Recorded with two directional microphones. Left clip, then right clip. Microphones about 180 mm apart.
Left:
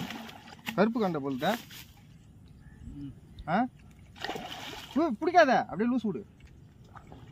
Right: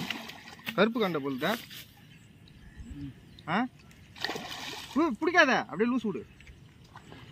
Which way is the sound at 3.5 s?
60° left (ahead or behind).